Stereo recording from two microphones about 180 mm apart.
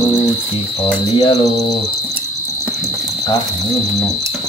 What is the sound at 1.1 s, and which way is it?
Mantra, 20° left (ahead or behind).